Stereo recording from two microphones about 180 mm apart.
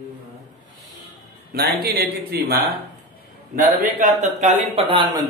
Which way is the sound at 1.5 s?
60° right (ahead or behind).